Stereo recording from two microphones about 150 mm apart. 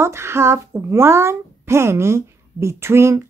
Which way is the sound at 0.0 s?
15° right (ahead or behind).